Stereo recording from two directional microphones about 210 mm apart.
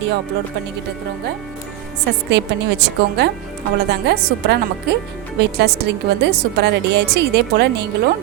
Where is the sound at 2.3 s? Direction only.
55° right (ahead or behind).